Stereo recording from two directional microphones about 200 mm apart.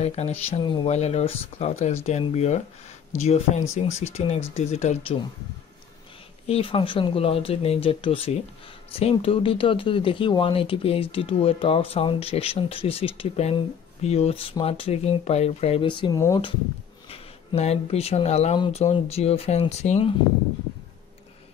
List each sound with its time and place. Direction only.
0.0 s speech: 30° left (ahead or behind)
6.4 s speech: 30° left (ahead or behind)